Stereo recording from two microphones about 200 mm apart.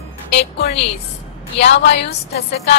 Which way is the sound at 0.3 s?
60° left (ahead or behind).